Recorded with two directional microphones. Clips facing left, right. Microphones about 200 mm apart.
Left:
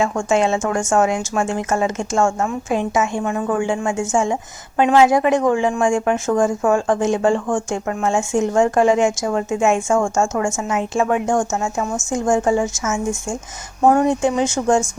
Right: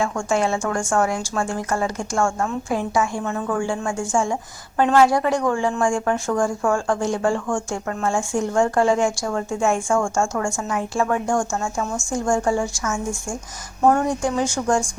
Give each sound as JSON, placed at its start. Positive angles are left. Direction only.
{"t": 0.0, "sound": "a woman's voice", "side_deg": 20}
{"t": 4.8, "sound": "a woman's voice", "side_deg": 10}